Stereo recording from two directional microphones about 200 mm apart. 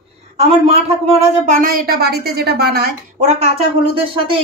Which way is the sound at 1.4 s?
40° right (ahead or behind).